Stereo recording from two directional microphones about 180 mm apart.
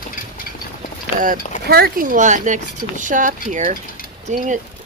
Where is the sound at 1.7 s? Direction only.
60° right (ahead or behind); by 4.5 s 45° right (ahead or behind).